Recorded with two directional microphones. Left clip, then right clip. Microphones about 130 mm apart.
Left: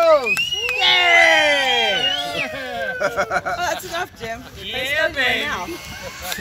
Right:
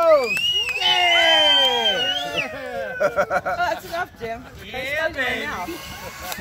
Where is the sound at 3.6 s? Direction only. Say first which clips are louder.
Even; 55° left (ahead or behind).